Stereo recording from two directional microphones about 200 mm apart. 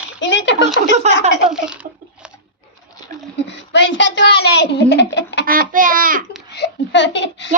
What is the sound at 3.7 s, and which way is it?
A child's voice, 65° left (ahead or behind).